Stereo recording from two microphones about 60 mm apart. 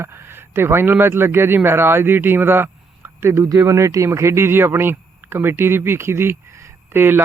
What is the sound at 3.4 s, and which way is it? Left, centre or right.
Speech, right.